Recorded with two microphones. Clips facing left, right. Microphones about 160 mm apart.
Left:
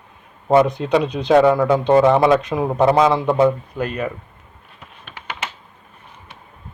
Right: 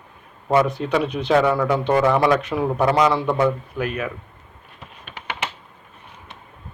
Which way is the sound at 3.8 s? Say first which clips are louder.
Left 2 dB; 35° left (ahead or behind).